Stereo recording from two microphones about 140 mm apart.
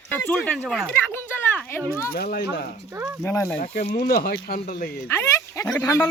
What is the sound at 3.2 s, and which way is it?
Speech, 15° left (ahead or behind).